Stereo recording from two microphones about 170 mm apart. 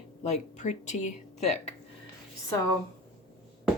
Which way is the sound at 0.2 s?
40° left (ahead or behind).